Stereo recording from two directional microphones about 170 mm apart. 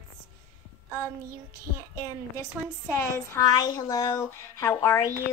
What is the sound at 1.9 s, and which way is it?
Speech, 20° left (ahead or behind).